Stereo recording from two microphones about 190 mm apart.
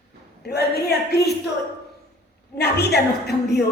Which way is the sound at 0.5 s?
60° left (ahead or behind).